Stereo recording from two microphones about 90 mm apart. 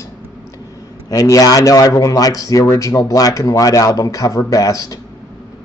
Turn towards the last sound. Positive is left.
turn(degrees=40)  # may be behind; listen again after turning